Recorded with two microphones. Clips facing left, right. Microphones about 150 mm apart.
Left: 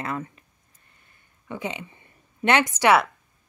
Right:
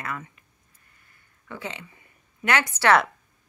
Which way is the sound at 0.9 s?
25° left (ahead or behind).